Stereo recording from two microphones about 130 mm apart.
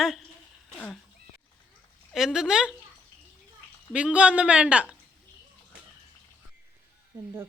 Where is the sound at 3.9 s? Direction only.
10° right (ahead or behind).